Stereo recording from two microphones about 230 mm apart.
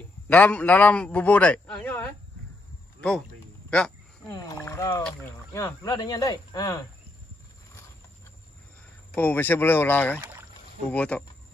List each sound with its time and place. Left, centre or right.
0.3 s a man's voice: centre
4.5 s speech: centre
9.1 s a man's voice: centre